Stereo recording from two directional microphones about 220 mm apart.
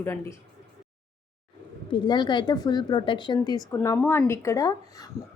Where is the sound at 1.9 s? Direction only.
20° left (ahead or behind).